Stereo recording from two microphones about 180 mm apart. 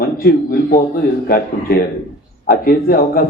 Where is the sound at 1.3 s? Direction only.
60° left (ahead or behind).